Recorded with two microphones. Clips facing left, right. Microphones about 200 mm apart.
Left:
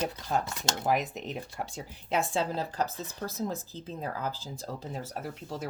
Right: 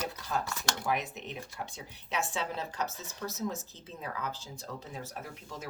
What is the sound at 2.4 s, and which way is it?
Speech, 35° left (ahead or behind).